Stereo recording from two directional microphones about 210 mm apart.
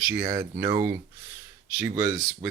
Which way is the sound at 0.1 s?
20° right (ahead or behind).